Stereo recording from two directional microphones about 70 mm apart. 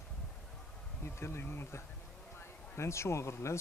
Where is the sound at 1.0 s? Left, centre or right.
Left.